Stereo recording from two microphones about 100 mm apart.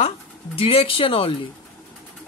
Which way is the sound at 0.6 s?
70° left (ahead or behind).